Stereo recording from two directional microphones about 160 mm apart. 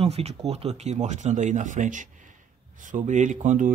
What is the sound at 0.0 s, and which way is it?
A man's voice, 40° right (ahead or behind).